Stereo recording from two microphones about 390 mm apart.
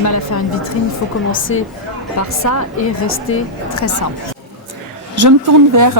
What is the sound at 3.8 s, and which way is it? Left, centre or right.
Speech, left.